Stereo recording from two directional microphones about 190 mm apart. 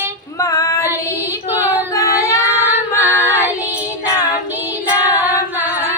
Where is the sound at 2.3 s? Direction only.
10° right (ahead or behind).